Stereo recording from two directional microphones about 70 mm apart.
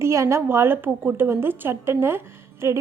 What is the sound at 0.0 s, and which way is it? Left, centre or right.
A woman's voice, right.